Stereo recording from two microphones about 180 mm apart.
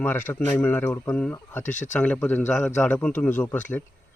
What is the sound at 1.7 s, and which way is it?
Speech, 45° left (ahead or behind).